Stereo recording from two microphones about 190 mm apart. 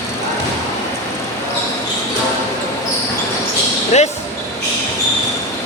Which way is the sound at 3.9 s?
35° left (ahead or behind).